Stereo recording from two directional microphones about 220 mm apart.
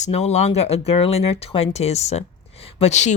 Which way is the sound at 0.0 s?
30° left (ahead or behind).